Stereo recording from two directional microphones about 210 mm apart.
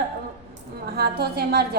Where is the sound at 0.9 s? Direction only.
50° right (ahead or behind).